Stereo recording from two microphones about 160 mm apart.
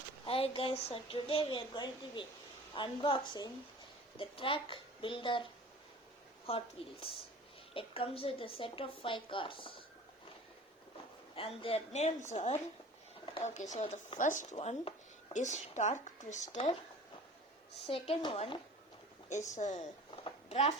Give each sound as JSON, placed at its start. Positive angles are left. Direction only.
{"t": 0.3, "sound": "a woman's voice", "side_deg": 35}
{"t": 6.5, "sound": "a woman's voice", "side_deg": 40}
{"t": 7.7, "sound": "a woman's voice", "side_deg": 35}
{"t": 11.3, "sound": "a woman's voice", "side_deg": 35}
{"t": 14.2, "sound": "a woman's voice", "side_deg": 50}
{"t": 17.8, "sound": "a woman's voice", "side_deg": 35}
{"t": 19.3, "sound": "a woman's voice", "side_deg": 50}
{"t": 20.2, "sound": "a sound", "side_deg": 40}